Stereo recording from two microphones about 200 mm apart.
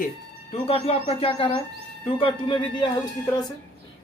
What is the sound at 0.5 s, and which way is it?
Speech, 30° left (ahead or behind).